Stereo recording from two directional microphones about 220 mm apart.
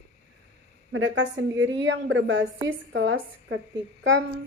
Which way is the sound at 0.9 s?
60° right (ahead or behind).